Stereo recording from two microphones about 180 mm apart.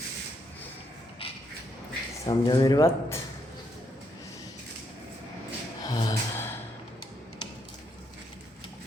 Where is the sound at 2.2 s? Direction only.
25° left (ahead or behind).